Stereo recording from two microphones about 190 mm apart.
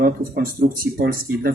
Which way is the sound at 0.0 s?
50° right (ahead or behind).